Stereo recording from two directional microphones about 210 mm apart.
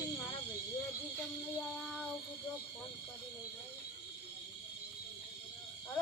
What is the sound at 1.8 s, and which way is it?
Speech, centre (ahead or behind).